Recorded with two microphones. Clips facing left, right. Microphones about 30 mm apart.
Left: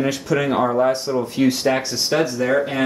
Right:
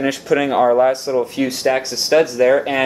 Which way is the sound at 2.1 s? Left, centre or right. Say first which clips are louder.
Right 6 dB; centre.